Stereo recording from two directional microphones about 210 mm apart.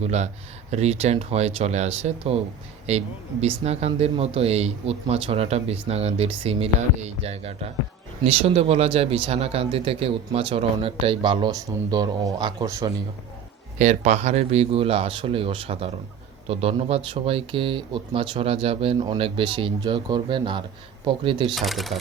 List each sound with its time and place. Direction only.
0.0 s speech: 30° right (ahead or behind)
13.7 s speech: 35° right (ahead or behind)
21.5 s speech: centre (ahead or behind)